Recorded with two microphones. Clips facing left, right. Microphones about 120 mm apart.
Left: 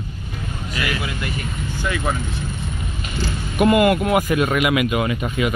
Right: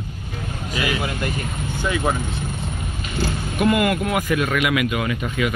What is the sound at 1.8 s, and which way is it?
Speech, 20° right (ahead or behind).